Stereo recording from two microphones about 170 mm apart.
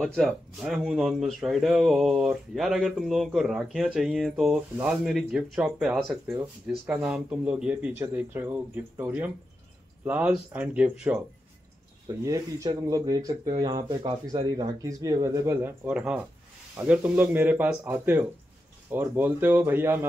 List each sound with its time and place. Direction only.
0.0 s speech: centre (ahead or behind)